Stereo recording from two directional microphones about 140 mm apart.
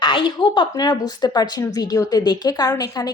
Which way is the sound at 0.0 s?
35° left (ahead or behind).